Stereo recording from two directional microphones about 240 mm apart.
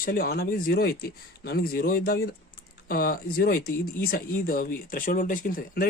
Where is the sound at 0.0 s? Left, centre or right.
Left.